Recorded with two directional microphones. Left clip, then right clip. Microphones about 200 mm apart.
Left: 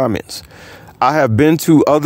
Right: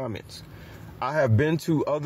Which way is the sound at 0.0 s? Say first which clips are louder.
Left 17 dB; 55° left (ahead or behind).